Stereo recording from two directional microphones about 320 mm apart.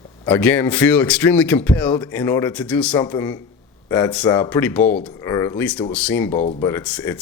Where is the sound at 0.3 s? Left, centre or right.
Centre.